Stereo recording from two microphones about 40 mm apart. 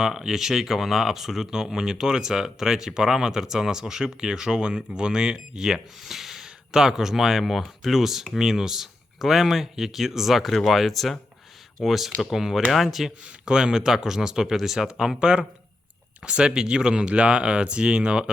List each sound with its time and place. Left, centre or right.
0.0 s speech: centre
13.4 s speech: centre
16.2 s speech: right